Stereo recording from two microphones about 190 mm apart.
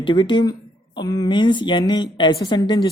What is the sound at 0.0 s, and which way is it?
A woman's voice, 25° left (ahead or behind).